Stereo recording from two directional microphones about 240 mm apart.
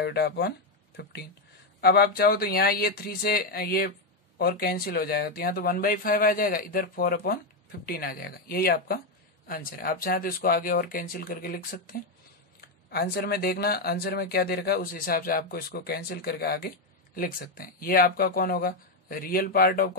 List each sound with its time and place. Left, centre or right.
0.0 s speech: left